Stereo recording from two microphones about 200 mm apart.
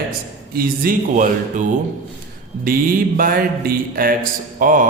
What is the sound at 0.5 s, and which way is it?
Speech, 45° right (ahead or behind).